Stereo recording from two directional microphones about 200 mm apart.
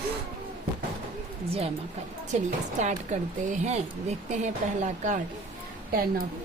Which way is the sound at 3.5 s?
35° right (ahead or behind).